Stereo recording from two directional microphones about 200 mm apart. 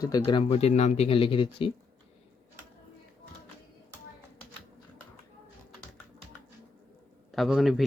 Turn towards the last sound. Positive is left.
turn(degrees=0)  # may be behind; listen again after turning